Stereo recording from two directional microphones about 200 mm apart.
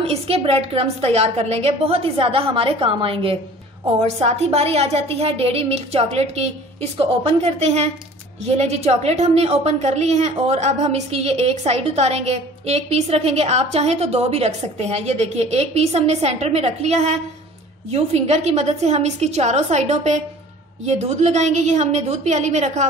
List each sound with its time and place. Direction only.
0.0 s a woman's voice: 30° right (ahead or behind)